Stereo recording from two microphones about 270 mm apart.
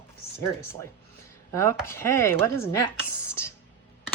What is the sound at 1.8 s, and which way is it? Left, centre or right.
Speech, centre.